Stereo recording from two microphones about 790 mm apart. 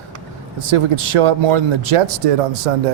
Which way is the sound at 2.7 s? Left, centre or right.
Right.